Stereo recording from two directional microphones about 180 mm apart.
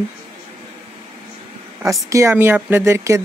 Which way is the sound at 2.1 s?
15° right (ahead or behind).